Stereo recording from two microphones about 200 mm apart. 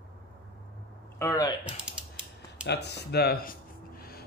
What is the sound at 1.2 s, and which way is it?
Speech, 15° left (ahead or behind).